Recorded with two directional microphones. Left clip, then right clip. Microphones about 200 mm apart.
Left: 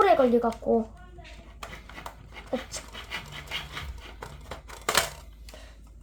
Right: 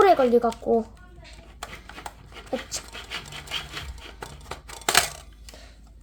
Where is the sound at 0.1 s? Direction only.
40° right (ahead or behind).